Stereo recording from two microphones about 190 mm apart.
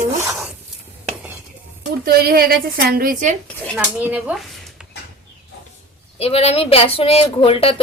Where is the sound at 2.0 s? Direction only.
55° right (ahead or behind).